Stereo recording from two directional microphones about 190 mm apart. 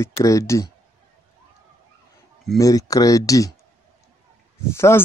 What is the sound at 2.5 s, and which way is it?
Speech, 20° left (ahead or behind).